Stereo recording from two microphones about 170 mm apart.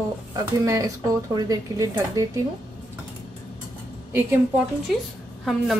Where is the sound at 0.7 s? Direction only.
20° right (ahead or behind).